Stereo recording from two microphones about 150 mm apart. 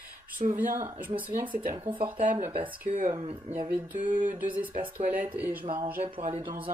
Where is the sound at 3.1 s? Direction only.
40° right (ahead or behind).